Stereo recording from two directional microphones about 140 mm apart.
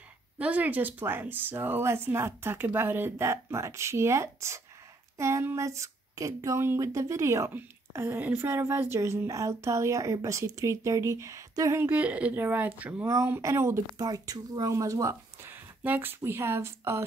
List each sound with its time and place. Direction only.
0.4 s speech: 10° right (ahead or behind)